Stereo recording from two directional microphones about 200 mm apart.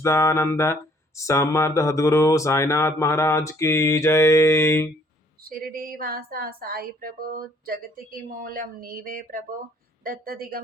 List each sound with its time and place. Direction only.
0.0 s speech: 15° left (ahead or behind)
5.5 s a woman's voice: 45° right (ahead or behind)